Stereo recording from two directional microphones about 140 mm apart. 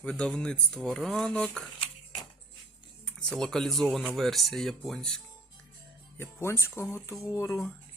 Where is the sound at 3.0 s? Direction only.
5° left (ahead or behind).